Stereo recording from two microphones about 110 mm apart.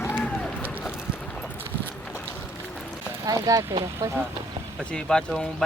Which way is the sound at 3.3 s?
35° right (ahead or behind).